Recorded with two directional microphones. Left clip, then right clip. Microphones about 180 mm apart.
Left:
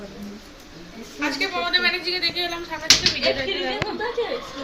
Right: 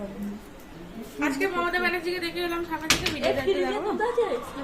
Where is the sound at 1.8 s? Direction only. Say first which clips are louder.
Left 5 dB; 60° right (ahead or behind).